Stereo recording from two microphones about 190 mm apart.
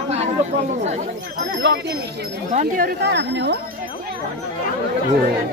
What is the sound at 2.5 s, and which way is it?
Speech, 45° right (ahead or behind).